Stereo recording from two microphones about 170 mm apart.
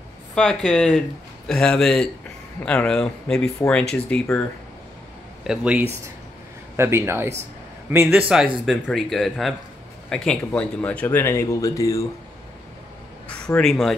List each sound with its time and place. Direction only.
0.3 s speech: 5° left (ahead or behind)
5.4 s a man's voice: 5° right (ahead or behind); by 12.0 s 20° left (ahead or behind)
13.6 s speech: centre (ahead or behind)